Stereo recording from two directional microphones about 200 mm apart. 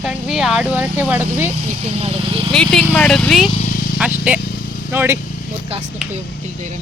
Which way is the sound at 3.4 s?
35° left (ahead or behind).